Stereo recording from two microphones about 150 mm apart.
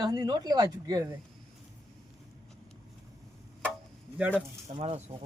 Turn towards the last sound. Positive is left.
turn(degrees=-40)  # may be behind; listen again after turning